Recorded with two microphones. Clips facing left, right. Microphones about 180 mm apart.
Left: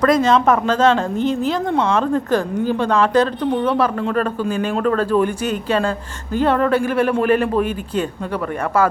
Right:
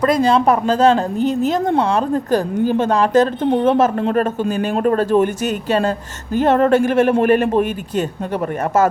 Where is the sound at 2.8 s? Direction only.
40° right (ahead or behind).